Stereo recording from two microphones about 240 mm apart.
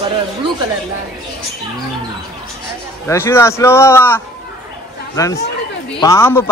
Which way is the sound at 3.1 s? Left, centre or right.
Centre.